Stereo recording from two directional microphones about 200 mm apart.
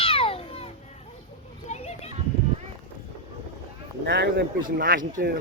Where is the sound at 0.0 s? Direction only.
30° left (ahead or behind).